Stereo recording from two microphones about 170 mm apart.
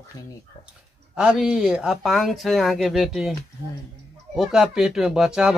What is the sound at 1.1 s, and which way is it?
Speech, 5° right (ahead or behind).